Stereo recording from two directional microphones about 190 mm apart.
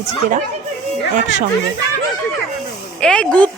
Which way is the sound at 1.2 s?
40° right (ahead or behind).